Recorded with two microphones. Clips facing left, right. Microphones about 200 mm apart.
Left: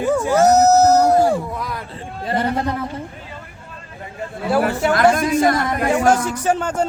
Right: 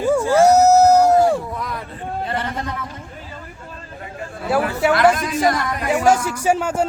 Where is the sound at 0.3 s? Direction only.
10° right (ahead or behind).